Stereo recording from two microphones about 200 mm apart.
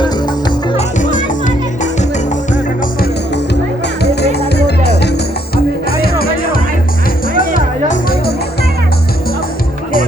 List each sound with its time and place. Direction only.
0.8 s music: 40° left (ahead or behind)
4.0 s music: 55° left (ahead or behind)